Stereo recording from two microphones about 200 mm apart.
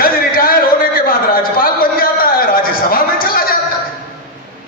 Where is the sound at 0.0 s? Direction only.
45° left (ahead or behind).